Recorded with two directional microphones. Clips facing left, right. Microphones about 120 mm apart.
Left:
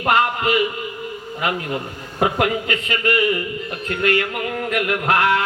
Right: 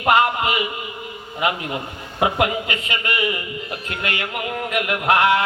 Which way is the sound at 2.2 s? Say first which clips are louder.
Left 1 dB; 15° right (ahead or behind).